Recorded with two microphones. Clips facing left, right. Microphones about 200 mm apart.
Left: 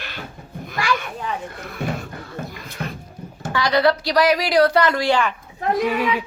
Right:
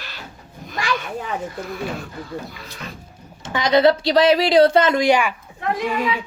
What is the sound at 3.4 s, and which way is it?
Speech, 20° right (ahead or behind).